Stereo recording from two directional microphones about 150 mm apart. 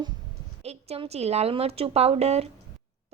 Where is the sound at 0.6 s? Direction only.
45° right (ahead or behind).